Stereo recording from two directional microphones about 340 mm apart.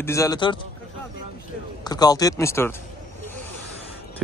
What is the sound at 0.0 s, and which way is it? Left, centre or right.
Speech, centre.